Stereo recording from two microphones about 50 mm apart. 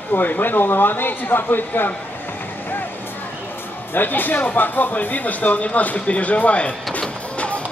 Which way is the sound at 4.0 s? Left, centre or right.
Left.